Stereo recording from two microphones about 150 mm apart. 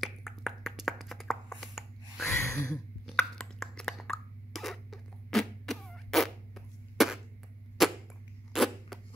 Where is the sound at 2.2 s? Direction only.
20° left (ahead or behind).